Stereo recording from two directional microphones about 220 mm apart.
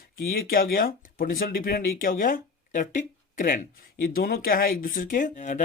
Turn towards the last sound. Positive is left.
turn(degrees=35)  # may be behind; listen again after turning